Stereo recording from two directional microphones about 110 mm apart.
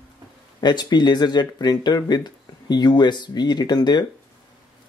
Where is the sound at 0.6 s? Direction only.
40° left (ahead or behind).